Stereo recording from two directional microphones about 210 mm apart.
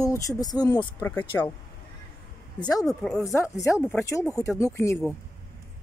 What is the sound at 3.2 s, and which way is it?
Speech, 15° left (ahead or behind).